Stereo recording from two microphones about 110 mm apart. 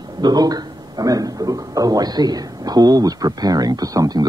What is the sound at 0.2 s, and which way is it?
A man's voice, 35° right (ahead or behind).